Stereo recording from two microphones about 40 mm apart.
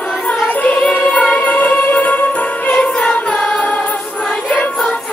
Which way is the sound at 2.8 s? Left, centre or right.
Centre.